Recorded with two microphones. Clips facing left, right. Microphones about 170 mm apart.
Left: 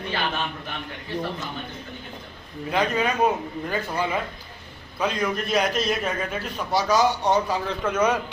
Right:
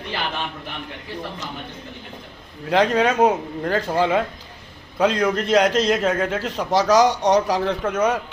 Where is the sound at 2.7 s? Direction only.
90° right.